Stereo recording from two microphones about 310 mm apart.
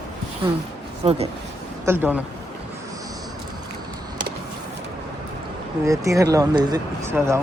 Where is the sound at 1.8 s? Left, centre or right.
Centre.